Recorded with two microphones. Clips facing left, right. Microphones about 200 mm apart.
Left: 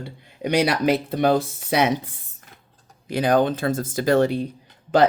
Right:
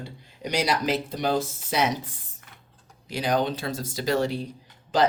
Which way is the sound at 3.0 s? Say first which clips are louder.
Left 6 dB; 55° left (ahead or behind).